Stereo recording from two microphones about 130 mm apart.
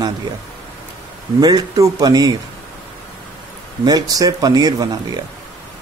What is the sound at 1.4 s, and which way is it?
Speech, 30° right (ahead or behind).